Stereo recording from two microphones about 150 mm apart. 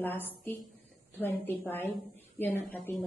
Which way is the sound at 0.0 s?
15° left (ahead or behind).